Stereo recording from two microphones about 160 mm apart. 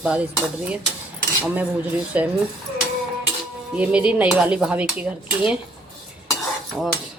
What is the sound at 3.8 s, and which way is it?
Cutlery, 10° right (ahead or behind).